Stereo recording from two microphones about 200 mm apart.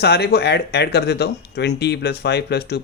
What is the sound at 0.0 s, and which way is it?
Speech, 55° left (ahead or behind).